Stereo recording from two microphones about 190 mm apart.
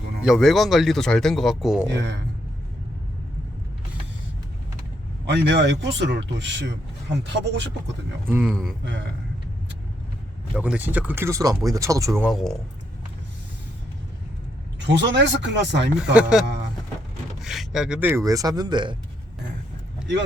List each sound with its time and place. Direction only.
0.2 s speech: centre (ahead or behind)
2.0 s speech: 65° right (ahead or behind)
5.2 s speech: 65° right (ahead or behind)
8.3 s speech: 5° right (ahead or behind)
8.8 s speech: 65° right (ahead or behind)
10.5 s speech: 5° right (ahead or behind)
12.3 s speech: centre (ahead or behind)
14.8 s speech: 65° right (ahead or behind)
16.1 s speech: 5° right (ahead or behind); by 18.9 s 25° right (ahead or behind)